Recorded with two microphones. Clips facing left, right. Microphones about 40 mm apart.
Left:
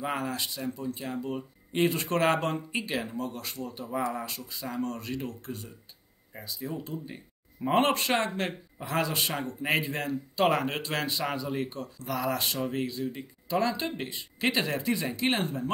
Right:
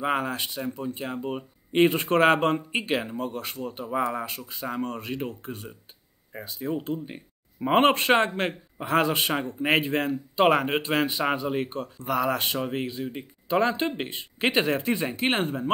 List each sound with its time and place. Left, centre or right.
0.0 s speech: right
10.3 s speech: right